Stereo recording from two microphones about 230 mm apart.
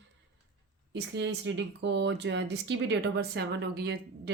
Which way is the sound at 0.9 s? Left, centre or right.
Right.